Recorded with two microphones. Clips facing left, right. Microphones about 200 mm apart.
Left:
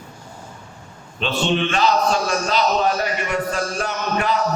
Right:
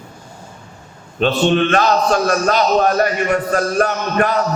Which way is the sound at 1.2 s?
50° right (ahead or behind).